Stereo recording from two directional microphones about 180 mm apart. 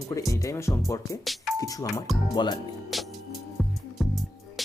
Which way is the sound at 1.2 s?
Centre (ahead or behind).